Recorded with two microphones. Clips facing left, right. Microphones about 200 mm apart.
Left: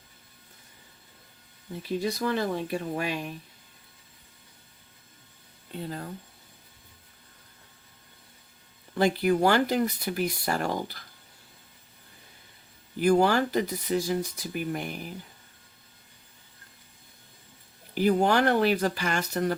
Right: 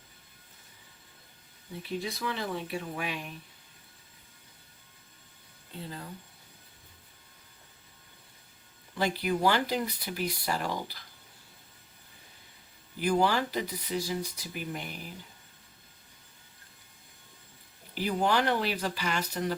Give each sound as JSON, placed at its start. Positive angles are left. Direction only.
{"t": 2.0, "sound": "speech", "side_deg": 45}
{"t": 9.0, "sound": "speech", "side_deg": 50}
{"t": 13.0, "sound": "speech", "side_deg": 45}
{"t": 17.9, "sound": "speech", "side_deg": 50}